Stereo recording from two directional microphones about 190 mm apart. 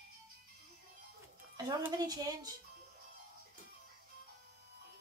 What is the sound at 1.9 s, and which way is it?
Speech, 20° right (ahead or behind).